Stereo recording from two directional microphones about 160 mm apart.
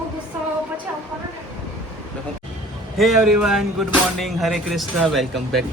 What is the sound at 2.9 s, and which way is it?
Speech, centre (ahead or behind).